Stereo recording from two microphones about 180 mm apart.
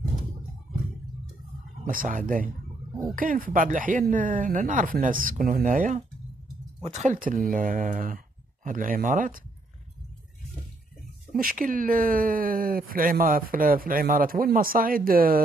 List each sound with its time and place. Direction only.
1.9 s speech: 50° right (ahead or behind)
11.3 s speech: 50° right (ahead or behind)